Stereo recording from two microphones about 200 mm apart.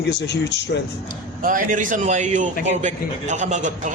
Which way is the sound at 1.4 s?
40° right (ahead or behind).